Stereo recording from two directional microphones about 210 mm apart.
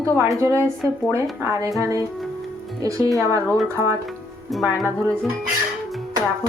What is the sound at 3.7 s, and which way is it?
Speech, 15° right (ahead or behind).